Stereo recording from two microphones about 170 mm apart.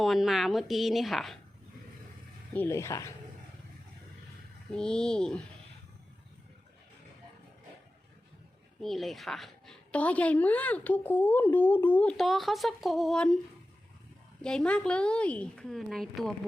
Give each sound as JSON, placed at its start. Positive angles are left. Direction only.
{"t": 0.0, "sound": "a woman's voice", "side_deg": 0}
{"t": 2.5, "sound": "a woman's voice", "side_deg": 15}
{"t": 4.7, "sound": "a woman's voice", "side_deg": 5}
{"t": 8.8, "sound": "a woman's voice", "side_deg": 0}
{"t": 14.4, "sound": "a woman's voice", "side_deg": 5}